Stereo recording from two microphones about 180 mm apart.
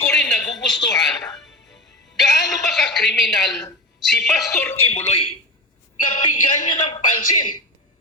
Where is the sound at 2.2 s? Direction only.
Centre (ahead or behind).